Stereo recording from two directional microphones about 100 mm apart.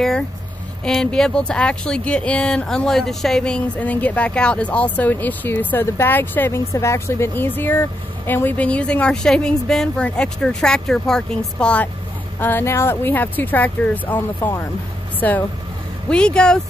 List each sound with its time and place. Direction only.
0.8 s speech: 5° left (ahead or behind)